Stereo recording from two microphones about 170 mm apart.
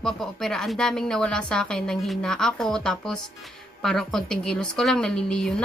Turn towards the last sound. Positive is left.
turn(degrees=5)  # may be behind; listen again after turning